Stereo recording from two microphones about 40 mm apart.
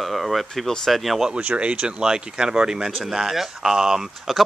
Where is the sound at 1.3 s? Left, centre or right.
Right.